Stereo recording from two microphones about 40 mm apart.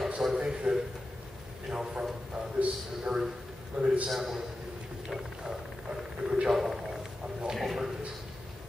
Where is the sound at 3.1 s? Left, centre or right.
Right.